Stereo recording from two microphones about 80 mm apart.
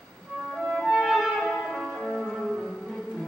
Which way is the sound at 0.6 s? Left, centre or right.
Centre.